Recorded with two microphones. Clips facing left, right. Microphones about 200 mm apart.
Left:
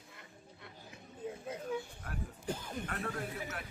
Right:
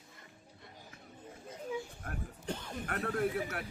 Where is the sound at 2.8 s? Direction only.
55° right (ahead or behind).